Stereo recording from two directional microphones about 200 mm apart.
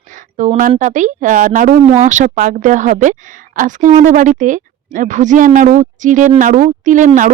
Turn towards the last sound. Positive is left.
turn(degrees=-40)  # may be behind; listen again after turning